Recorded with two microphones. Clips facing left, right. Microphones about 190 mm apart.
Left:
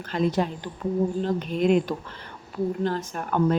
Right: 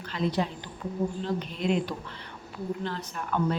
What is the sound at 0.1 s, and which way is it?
Speech, 50° left (ahead or behind).